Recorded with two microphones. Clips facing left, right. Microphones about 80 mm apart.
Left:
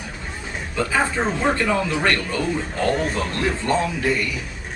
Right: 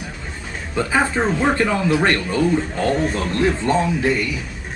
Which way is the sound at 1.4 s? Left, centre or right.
Centre.